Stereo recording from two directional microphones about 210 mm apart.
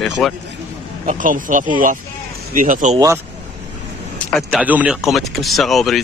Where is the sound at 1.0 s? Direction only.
40° right (ahead or behind).